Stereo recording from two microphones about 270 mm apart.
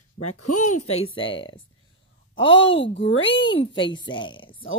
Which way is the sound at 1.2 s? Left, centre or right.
Centre.